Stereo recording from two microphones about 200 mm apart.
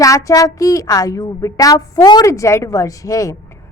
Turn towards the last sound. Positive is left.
turn(degrees=15)  # may be behind; listen again after turning